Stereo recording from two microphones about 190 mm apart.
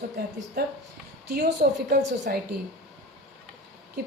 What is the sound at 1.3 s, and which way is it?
A woman's voice, 55° right (ahead or behind).